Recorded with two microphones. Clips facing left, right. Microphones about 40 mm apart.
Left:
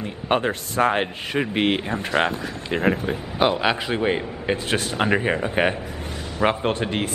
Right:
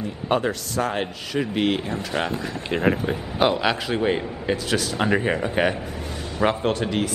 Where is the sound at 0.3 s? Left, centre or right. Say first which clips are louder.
Left 1 dB; left.